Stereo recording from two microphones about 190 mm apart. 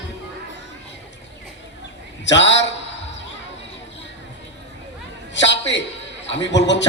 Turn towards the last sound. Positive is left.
turn(degrees=70)  # may be behind; listen again after turning